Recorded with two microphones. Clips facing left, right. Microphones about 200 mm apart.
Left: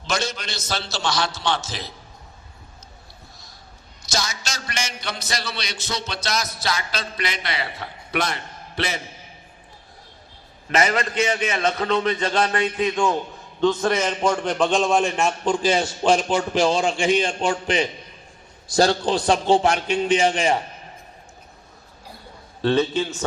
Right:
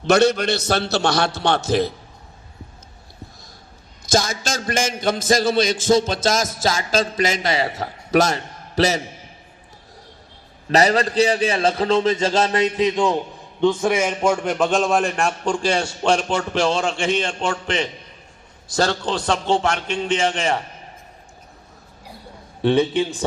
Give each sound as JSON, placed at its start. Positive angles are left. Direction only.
{"t": 0.0, "sound": "a man's voice", "side_deg": -60}
{"t": 4.1, "sound": "a man's voice", "side_deg": -50}
{"t": 10.7, "sound": "a man's voice", "side_deg": -35}
{"t": 18.7, "sound": "a man's voice", "side_deg": 10}
{"t": 22.6, "sound": "a man's voice", "side_deg": -15}